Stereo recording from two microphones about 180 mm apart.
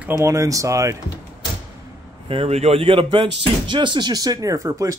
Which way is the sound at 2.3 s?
35° right (ahead or behind).